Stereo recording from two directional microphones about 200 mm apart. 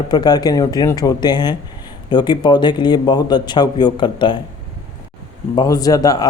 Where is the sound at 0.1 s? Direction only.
20° left (ahead or behind).